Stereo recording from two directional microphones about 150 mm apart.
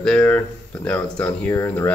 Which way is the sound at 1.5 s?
20° left (ahead or behind).